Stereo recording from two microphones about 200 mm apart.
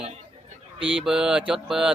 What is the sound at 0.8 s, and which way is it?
Speech, 25° right (ahead or behind).